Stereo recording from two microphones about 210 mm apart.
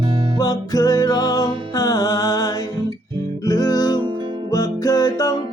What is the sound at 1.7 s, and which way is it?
Music, 15° left (ahead or behind).